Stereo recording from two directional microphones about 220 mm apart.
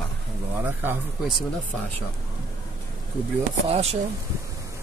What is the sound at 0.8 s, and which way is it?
Speech, 5° right (ahead or behind).